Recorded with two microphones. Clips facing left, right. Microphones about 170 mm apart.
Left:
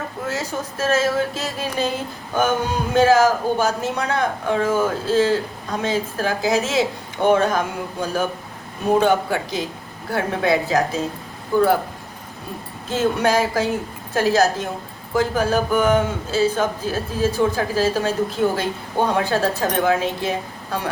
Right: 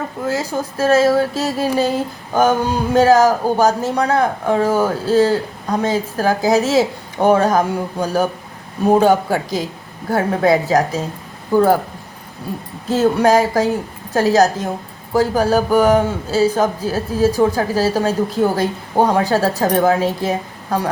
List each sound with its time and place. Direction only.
0.3 s a man's voice: 30° right (ahead or behind)
8.9 s a man's voice: 40° right (ahead or behind)
12.9 s a man's voice: 35° right (ahead or behind)